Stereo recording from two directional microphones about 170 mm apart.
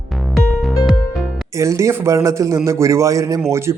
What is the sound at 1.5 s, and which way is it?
A man's voice, 20° right (ahead or behind).